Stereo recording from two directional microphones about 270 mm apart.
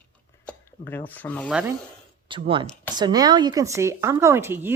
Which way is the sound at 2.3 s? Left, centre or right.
Centre.